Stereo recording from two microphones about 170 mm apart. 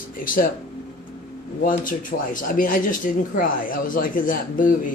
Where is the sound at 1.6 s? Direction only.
55° left (ahead or behind).